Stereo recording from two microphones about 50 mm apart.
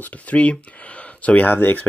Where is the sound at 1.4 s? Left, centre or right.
Left.